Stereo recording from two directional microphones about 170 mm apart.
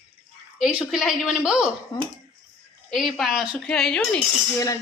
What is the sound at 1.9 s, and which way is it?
Speech, 25° left (ahead or behind).